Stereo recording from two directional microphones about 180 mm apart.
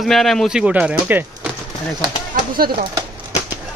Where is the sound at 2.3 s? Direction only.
50° right (ahead or behind).